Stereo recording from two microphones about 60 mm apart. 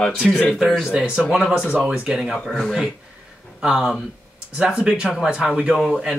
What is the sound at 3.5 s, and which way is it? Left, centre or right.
Speech, centre.